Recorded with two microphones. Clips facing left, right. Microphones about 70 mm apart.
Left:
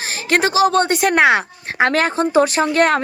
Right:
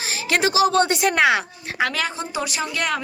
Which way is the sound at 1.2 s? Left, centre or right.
Left.